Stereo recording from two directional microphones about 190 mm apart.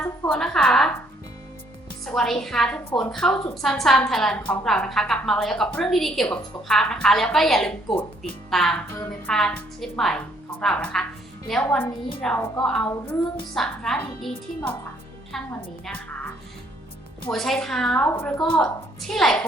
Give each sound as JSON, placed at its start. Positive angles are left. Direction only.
{"t": 0.0, "sound": "a woman's voice", "side_deg": 5}
{"t": 2.1, "sound": "a woman's voice", "side_deg": 0}
{"t": 9.0, "sound": "music", "side_deg": 5}
{"t": 9.8, "sound": "a woman's voice", "side_deg": 0}
{"t": 11.8, "sound": "a woman's voice", "side_deg": 25}
{"t": 12.2, "sound": "a woman's voice", "side_deg": 5}
{"t": 17.3, "sound": "a woman's voice", "side_deg": 0}